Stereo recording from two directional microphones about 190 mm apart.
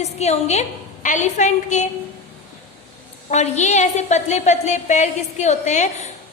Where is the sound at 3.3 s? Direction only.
35° left (ahead or behind).